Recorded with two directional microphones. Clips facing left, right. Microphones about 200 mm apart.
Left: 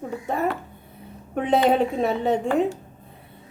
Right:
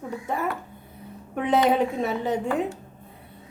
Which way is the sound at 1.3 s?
30° left (ahead or behind).